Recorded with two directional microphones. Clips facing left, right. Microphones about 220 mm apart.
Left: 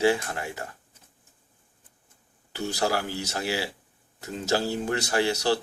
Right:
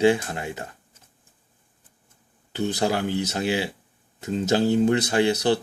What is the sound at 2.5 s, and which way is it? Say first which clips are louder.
Speech: right 3 dB; 20° right (ahead or behind).